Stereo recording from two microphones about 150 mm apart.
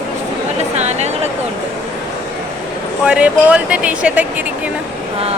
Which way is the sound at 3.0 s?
5° right (ahead or behind).